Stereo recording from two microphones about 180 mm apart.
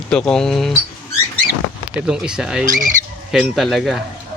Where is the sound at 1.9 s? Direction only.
5° right (ahead or behind).